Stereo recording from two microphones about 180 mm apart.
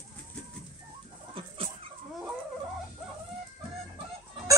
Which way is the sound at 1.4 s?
30° right (ahead or behind).